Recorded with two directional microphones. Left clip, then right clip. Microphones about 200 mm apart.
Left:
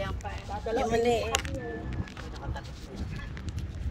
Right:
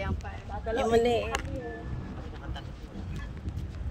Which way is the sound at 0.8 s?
45° right (ahead or behind).